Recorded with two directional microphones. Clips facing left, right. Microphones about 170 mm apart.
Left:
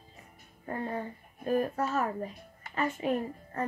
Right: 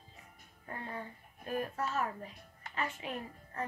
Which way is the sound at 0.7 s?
40° left (ahead or behind).